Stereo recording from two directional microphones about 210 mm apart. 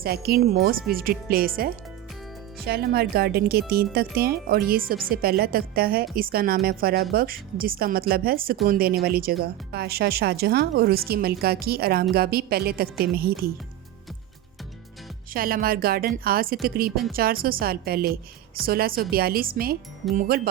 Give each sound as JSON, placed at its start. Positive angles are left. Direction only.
{"t": 0.0, "sound": "speech", "side_deg": -45}
{"t": 15.3, "sound": "speech", "side_deg": -45}